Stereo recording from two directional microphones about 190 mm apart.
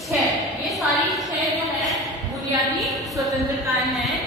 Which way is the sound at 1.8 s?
Centre (ahead or behind).